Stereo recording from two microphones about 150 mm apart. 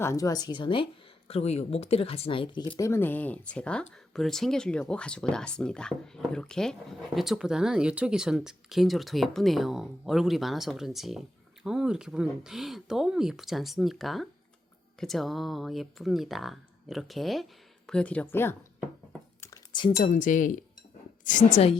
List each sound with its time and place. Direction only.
0.0 s a woman's voice: 20° left (ahead or behind)
19.7 s speech: 30° left (ahead or behind)
20.1 s speech: 60° left (ahead or behind)